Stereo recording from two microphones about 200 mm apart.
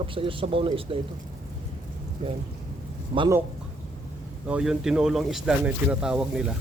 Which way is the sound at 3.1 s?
30° right (ahead or behind).